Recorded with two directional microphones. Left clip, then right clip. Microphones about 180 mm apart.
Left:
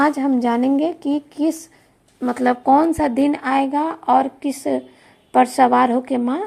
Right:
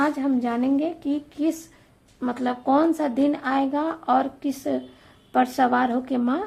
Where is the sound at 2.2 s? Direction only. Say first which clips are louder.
Left 8 dB; 30° left (ahead or behind).